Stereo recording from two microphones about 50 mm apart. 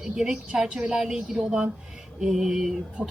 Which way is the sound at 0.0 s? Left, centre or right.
Centre.